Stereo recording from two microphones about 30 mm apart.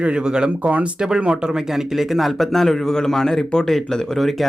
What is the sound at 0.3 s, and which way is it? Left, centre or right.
Speech, right.